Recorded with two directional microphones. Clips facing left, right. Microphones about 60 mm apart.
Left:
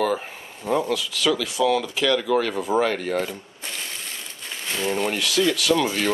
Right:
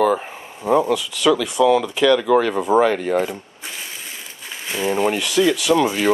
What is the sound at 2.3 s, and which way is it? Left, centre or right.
Speech, right.